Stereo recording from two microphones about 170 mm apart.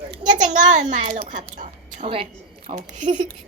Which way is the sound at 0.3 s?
45° right (ahead or behind).